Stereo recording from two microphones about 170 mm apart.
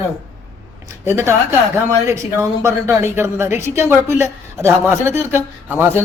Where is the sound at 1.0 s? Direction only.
15° right (ahead or behind).